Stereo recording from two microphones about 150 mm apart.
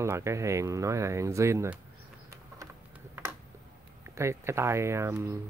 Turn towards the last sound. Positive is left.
turn(degrees=-15)  # may be behind; listen again after turning